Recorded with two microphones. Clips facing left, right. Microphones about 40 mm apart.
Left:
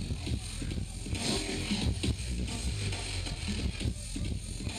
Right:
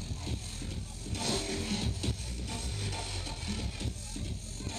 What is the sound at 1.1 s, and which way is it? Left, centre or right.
Music, left.